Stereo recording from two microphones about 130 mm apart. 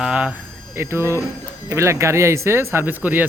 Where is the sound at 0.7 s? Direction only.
20° right (ahead or behind).